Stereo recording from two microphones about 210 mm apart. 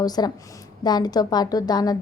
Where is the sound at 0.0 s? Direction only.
20° left (ahead or behind).